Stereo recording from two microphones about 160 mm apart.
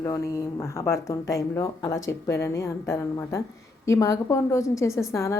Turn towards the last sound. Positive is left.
turn(degrees=20)  # may be behind; listen again after turning